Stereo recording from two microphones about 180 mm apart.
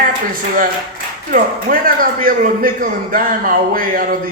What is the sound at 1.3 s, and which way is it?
A man's voice, 50° right (ahead or behind).